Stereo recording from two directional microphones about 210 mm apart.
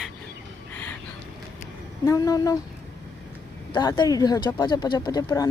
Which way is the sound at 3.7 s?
20° left (ahead or behind).